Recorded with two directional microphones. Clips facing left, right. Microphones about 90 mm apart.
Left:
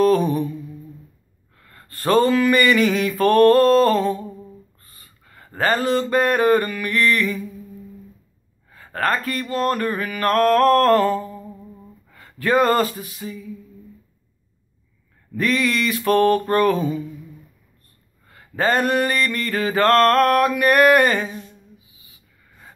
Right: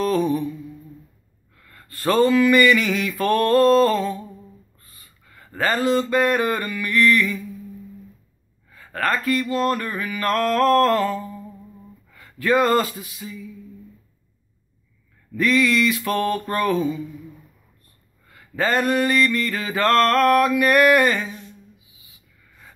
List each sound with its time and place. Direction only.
0.0 s mantra: 40° left (ahead or behind)
1.6 s mantra: 35° left (ahead or behind)
4.8 s a sound: 40° left (ahead or behind)
8.6 s mantra: 35° left (ahead or behind)
12.1 s speech: 40° left (ahead or behind)
15.3 s mantra: 40° left (ahead or behind)
18.3 s mantra: 40° left (ahead or behind)